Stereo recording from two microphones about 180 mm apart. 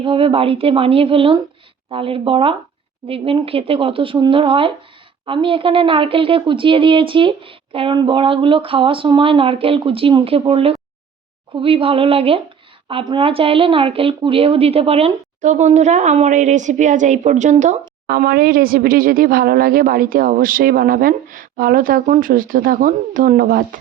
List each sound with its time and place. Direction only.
0.0 s a woman's voice: 30° right (ahead or behind); by 23.6 s 55° right (ahead or behind)